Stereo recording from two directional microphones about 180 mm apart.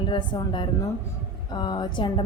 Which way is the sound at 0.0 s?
25° left (ahead or behind).